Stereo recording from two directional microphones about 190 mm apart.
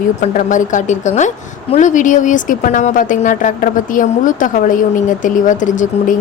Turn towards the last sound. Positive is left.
turn(degrees=40)  # may be behind; listen again after turning